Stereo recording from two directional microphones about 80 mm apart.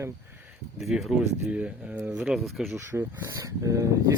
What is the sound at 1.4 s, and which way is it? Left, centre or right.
Speech, centre.